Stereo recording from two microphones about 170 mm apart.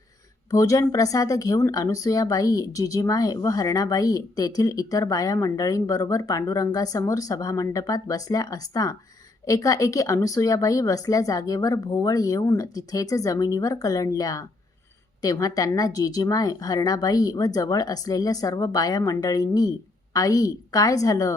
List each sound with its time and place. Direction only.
0.5 s speech: 20° left (ahead or behind)